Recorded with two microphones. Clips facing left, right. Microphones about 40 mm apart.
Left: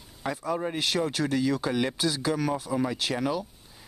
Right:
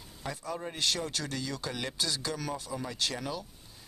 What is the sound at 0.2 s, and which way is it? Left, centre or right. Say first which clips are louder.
Speech: left 8 dB; centre.